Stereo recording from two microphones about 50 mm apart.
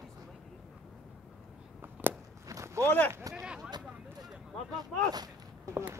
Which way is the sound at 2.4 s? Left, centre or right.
Right.